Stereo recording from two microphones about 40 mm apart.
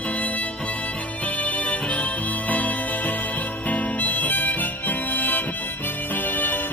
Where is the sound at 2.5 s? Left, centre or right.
Left.